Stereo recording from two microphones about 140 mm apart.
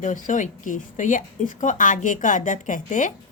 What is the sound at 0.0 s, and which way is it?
Speech, 65° left (ahead or behind).